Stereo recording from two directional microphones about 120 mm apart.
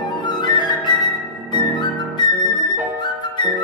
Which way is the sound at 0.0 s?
40° left (ahead or behind).